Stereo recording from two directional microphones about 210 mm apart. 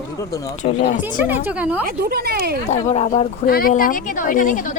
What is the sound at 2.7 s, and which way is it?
Speech, 30° left (ahead or behind).